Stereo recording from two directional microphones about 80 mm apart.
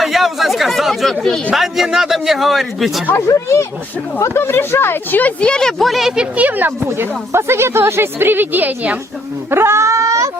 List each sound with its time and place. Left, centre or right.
0.0 s chatter: centre
1.5 s a man's voice: centre
3.2 s speech: left; by 6.2 s centre
6.3 s speech: right
9.5 s speech: right